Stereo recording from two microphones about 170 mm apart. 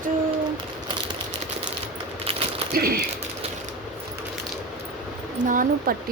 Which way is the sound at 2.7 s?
60° right (ahead or behind).